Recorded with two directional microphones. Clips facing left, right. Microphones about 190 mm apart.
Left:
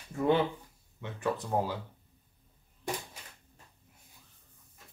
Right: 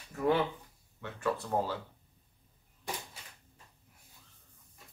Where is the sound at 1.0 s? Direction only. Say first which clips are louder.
Left 1 dB; 20° left (ahead or behind).